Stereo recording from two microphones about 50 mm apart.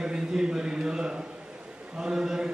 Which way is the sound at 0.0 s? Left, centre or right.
Centre.